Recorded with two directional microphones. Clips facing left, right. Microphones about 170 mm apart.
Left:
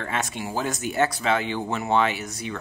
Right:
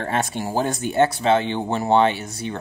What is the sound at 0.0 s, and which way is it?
Speech, 35° right (ahead or behind).